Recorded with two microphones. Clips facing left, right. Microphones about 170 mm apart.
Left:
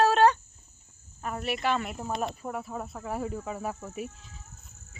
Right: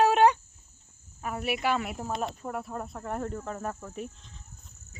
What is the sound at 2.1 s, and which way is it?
Insect, 10° left (ahead or behind).